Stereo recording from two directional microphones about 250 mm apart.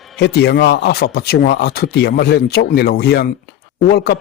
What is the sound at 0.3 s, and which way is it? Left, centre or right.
Speech, left.